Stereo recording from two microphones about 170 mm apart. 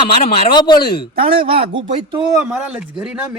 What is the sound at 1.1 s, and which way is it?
Speech, 30° right (ahead or behind).